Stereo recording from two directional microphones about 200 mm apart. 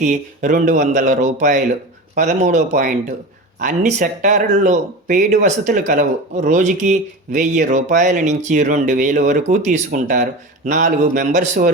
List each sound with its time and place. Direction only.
0.0 s speech: 40° right (ahead or behind)